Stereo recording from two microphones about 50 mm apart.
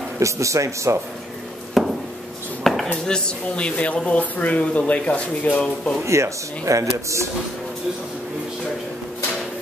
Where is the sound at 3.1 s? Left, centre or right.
Centre.